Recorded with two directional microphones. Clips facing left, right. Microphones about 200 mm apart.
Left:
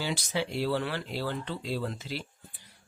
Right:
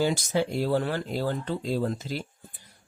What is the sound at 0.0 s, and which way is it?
Speech, 45° right (ahead or behind).